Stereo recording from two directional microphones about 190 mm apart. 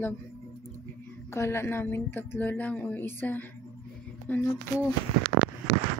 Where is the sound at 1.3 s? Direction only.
15° left (ahead or behind).